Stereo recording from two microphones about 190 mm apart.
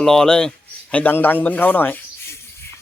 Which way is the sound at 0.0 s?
5° left (ahead or behind).